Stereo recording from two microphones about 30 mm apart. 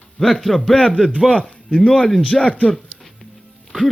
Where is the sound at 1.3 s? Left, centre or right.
Left.